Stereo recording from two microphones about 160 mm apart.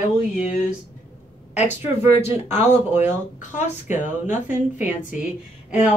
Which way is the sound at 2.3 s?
15° right (ahead or behind).